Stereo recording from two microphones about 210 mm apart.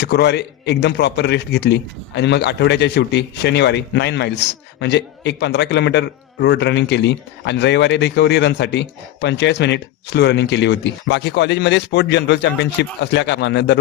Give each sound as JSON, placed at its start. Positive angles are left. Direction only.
{"t": 0.0, "sound": "a man's voice", "side_deg": 50}